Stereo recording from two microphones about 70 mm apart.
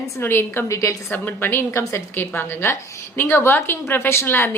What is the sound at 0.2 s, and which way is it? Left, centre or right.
Speech, left.